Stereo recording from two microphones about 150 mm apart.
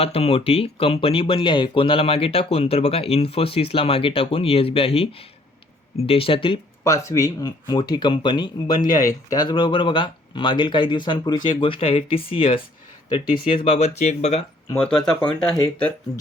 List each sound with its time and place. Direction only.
0.0 s speech: 40° left (ahead or behind)
7.1 s speech: 25° left (ahead or behind); by 14.4 s 45° left (ahead or behind)
14.7 s speech: 5° left (ahead or behind)